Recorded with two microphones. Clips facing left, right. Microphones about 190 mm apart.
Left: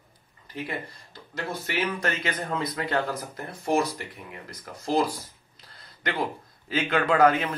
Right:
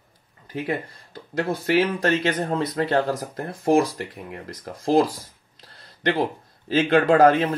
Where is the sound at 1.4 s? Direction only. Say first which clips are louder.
Right 9 dB; 50° right (ahead or behind).